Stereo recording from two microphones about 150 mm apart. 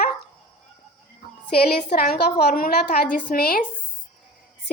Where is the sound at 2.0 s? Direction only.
80° left.